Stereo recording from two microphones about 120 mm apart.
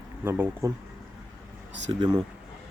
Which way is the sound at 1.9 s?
40° right (ahead or behind).